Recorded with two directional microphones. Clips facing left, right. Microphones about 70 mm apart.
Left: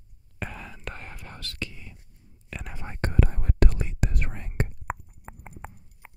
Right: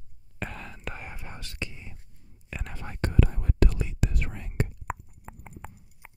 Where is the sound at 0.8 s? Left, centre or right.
Centre.